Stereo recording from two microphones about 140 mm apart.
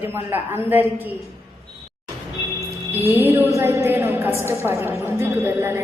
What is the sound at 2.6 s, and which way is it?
A woman's voice, 15° right (ahead or behind).